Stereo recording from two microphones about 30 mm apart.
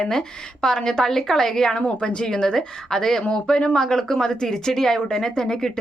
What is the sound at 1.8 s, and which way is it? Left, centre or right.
Speech, left.